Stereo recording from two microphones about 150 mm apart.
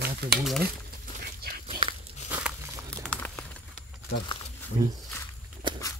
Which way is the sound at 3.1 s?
10° left (ahead or behind).